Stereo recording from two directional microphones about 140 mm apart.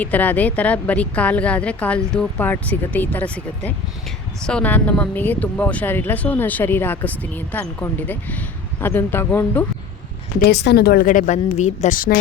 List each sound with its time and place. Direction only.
0.0 s speech: 10° left (ahead or behind)
10.4 s a woman's voice: 90° left